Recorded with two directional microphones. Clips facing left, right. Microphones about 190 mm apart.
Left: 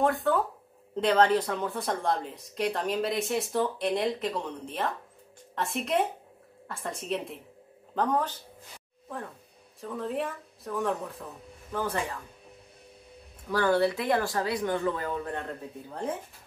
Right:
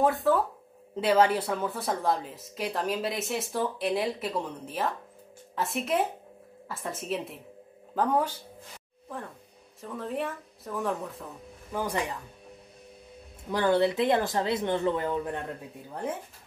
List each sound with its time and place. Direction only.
0.0 s speech: centre (ahead or behind)
9.8 s speech: centre (ahead or behind)
11.7 s speech: 15° right (ahead or behind)
13.5 s speech: 20° right (ahead or behind)